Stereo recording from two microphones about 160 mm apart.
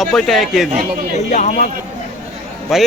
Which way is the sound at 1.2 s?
50° left (ahead or behind).